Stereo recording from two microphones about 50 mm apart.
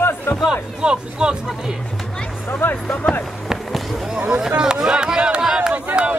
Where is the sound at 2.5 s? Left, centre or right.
Left.